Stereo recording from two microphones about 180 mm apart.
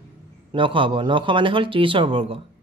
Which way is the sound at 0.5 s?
30° right (ahead or behind).